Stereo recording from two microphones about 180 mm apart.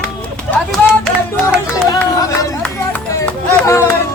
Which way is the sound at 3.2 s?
15° left (ahead or behind).